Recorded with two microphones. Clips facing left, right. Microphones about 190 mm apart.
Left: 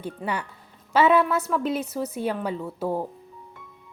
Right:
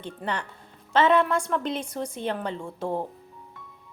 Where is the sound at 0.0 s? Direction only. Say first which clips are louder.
Left 2 dB; 10° left (ahead or behind).